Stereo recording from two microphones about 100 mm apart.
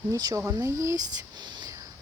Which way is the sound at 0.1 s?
35° right (ahead or behind).